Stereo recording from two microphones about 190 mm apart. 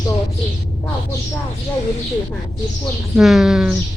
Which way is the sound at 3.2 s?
Centre (ahead or behind).